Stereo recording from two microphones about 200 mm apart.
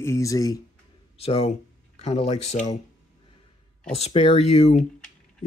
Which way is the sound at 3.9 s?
30° left (ahead or behind).